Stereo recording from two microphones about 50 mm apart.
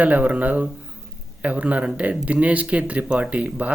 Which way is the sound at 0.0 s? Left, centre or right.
Right.